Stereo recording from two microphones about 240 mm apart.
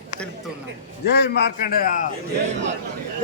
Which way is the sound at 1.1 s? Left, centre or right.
Left.